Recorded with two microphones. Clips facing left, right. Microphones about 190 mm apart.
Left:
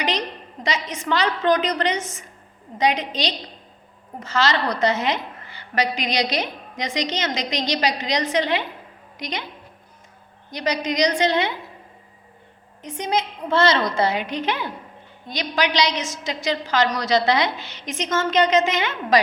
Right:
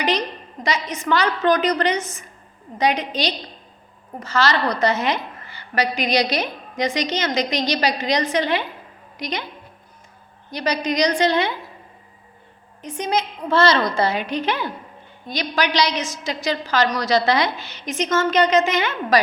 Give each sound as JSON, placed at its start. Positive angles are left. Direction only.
{"t": 0.6, "sound": "a woman's voice", "side_deg": 25}
{"t": 10.5, "sound": "a woman's voice", "side_deg": 20}
{"t": 12.8, "sound": "a woman's voice", "side_deg": 20}